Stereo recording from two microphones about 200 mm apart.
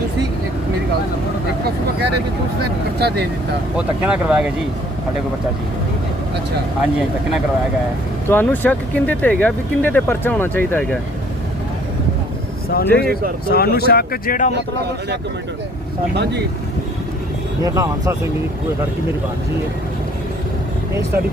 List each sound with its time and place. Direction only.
3.0 s speech: 55° right (ahead or behind)
3.8 s speech: 5° right (ahead or behind)
8.3 s speech: 10° left (ahead or behind)
12.7 s speech: 50° left (ahead or behind)
17.6 s speech: 15° right (ahead or behind)